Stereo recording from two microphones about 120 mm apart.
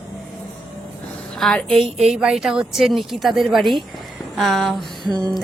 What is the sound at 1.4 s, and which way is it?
Speech, 5° left (ahead or behind).